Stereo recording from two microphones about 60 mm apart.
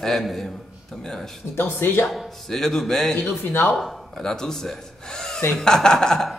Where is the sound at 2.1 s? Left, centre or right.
Centre.